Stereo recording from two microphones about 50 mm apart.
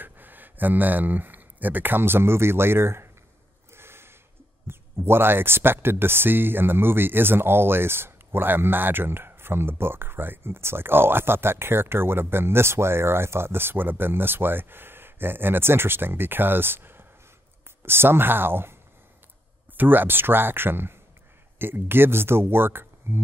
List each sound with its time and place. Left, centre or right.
0.0 s speech: right
3.7 s snort: right
4.6 s speech: right
19.8 s speech: right